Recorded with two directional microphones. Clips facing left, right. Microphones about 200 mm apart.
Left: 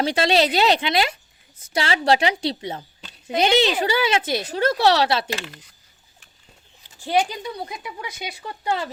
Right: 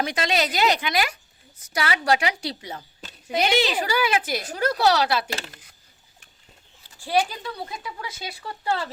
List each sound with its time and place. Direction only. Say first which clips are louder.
0.0 s speech: left 5 dB; 30° left (ahead or behind)
7.0 s speech: left 2 dB; 20° left (ahead or behind)